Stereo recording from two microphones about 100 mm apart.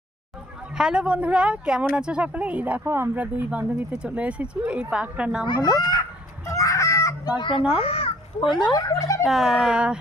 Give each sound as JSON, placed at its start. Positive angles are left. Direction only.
{"t": 0.8, "sound": "speech", "side_deg": -10}
{"t": 5.5, "sound": "speech", "side_deg": 40}
{"t": 6.5, "sound": "fowl", "side_deg": 35}
{"t": 7.3, "sound": "speech", "side_deg": 50}
{"t": 7.8, "sound": "a child's voice", "side_deg": 75}
{"t": 8.7, "sound": "speech", "side_deg": 35}
{"t": 9.2, "sound": "speech", "side_deg": -5}